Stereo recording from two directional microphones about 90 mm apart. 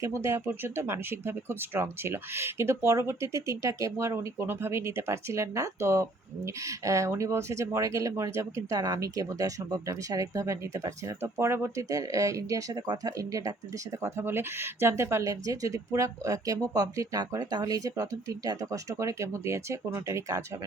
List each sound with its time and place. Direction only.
0.0 s speech: 35° right (ahead or behind)
14.0 s speech: 30° right (ahead or behind)